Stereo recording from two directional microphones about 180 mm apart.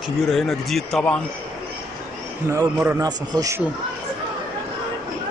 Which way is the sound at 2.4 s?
15° right (ahead or behind).